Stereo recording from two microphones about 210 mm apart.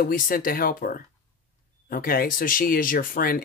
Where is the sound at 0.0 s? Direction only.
40° left (ahead or behind).